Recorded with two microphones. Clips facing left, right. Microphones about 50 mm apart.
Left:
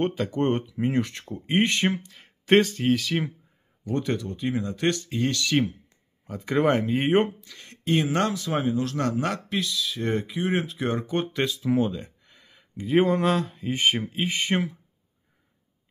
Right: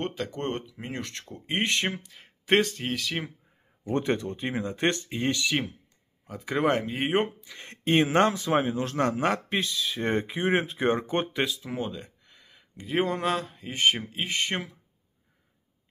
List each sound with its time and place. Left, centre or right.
0.0 s speech: centre
3.8 s speech: right; by 5.7 s centre
6.2 s speech: centre
7.4 s speech: right
11.4 s speech: centre